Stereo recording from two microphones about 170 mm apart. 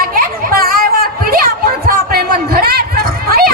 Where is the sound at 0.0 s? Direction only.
60° right (ahead or behind).